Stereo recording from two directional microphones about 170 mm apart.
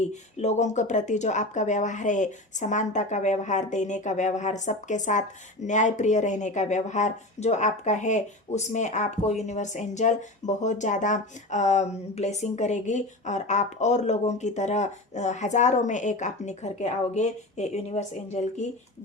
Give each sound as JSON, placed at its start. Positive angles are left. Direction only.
{"t": 0.1, "sound": "speech", "side_deg": 40}